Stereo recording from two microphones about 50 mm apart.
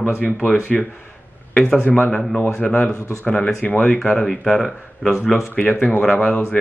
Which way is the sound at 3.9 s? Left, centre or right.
Centre.